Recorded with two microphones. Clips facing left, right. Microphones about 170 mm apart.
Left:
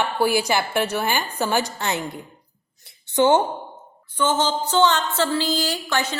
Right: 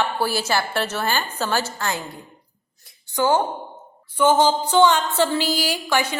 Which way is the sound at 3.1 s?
25° left (ahead or behind).